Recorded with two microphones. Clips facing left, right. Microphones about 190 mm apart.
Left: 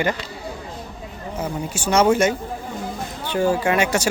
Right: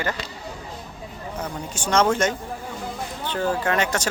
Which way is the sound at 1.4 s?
10° left (ahead or behind).